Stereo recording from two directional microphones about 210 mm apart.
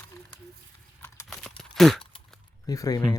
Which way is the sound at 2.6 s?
15° left (ahead or behind).